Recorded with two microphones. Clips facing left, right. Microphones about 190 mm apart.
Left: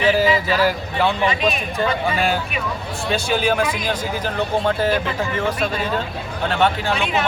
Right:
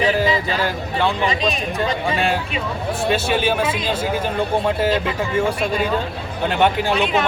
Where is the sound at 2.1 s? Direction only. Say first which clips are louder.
Even; centre (ahead or behind).